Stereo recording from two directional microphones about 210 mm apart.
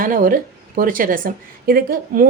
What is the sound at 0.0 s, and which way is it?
A woman's voice, 40° right (ahead or behind).